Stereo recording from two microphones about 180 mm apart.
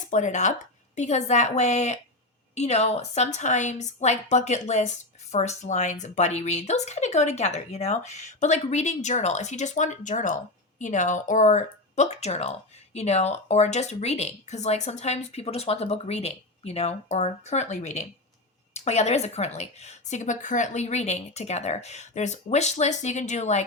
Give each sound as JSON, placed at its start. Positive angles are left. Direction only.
{"t": 0.1, "sound": "a woman's voice", "side_deg": 40}